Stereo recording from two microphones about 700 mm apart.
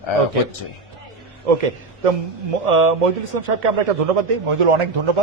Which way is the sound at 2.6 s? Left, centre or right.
Right.